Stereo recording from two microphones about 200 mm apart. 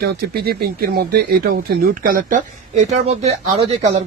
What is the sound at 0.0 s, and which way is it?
Speech, 50° right (ahead or behind).